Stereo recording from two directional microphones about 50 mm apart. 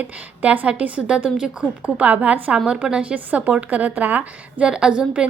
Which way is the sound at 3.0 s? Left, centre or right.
Right.